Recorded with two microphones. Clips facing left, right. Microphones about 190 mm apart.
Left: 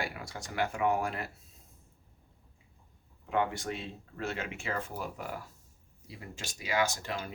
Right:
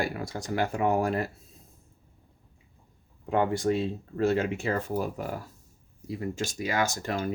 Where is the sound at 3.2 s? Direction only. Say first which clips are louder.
Right 7 dB; 40° right (ahead or behind).